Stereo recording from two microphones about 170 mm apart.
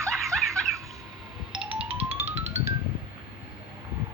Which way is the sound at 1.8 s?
35° right (ahead or behind).